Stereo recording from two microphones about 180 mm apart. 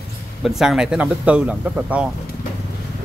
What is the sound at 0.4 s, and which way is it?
Speech, centre (ahead or behind).